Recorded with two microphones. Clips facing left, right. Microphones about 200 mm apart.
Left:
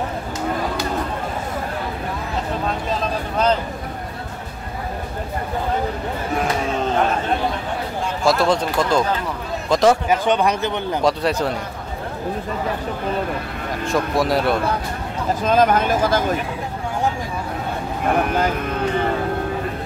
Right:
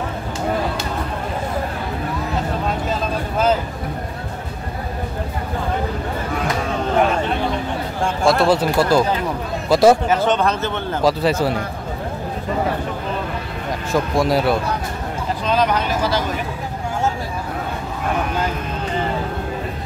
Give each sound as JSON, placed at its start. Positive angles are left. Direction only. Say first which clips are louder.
{"t": 2.9, "sound": "a sound", "louder": "right 1 dB", "side_deg": -5}
{"t": 8.3, "sound": "speech", "louder": "right 2 dB", "side_deg": -5}
{"t": 10.0, "sound": "speech", "louder": "even", "side_deg": 15}
{"t": 11.0, "sound": "speech", "louder": "right 3 dB", "side_deg": 0}
{"t": 13.9, "sound": "speech", "louder": "right 2 dB", "side_deg": 0}
{"t": 15.4, "sound": "speech", "louder": "left 3 dB", "side_deg": 50}